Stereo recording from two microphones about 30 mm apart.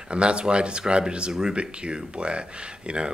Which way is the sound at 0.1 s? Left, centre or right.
Right.